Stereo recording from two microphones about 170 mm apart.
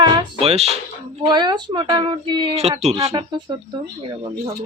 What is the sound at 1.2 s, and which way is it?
Speech, 25° right (ahead or behind).